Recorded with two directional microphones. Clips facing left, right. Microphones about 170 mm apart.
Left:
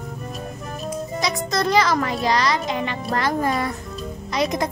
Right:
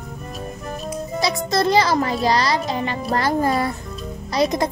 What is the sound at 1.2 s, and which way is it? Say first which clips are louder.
A child's voice: right 4 dB; 30° right (ahead or behind).